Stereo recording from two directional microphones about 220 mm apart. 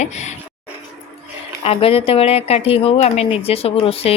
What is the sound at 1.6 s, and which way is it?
Speech, 25° left (ahead or behind).